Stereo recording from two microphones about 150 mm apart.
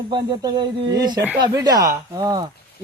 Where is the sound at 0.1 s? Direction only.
25° right (ahead or behind).